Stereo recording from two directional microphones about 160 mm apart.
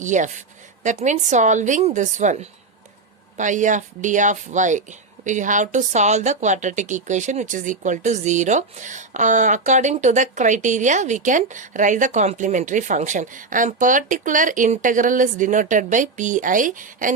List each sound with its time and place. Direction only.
0.0 s speech: 50° right (ahead or behind)